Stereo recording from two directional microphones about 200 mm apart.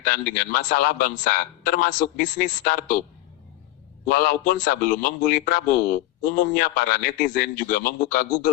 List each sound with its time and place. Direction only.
0.0 s a man's voice: 45° left (ahead or behind)
4.0 s a man's voice: 45° left (ahead or behind)